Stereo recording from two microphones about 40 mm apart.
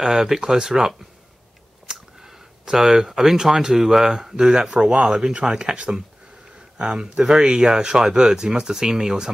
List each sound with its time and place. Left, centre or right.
0.0 s speech: centre